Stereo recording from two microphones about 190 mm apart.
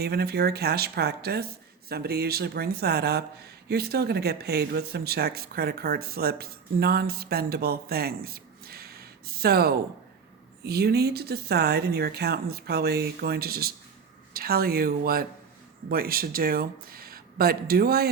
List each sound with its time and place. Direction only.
0.0 s speech: 55° right (ahead or behind)